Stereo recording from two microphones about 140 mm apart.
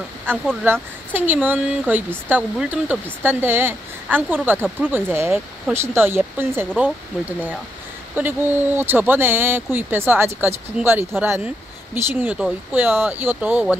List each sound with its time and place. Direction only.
0.3 s speech: 15° right (ahead or behind)
8.2 s speech: 15° right (ahead or behind)